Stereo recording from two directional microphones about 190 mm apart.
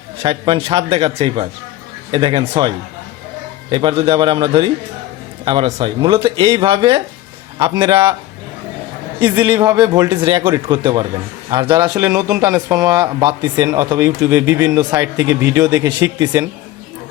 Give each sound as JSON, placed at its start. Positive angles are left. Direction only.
{"t": 0.2, "sound": "a man's voice", "side_deg": -30}
{"t": 9.4, "sound": "speech", "side_deg": -15}